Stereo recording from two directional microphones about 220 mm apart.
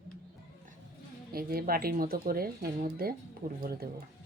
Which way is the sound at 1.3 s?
45° right (ahead or behind).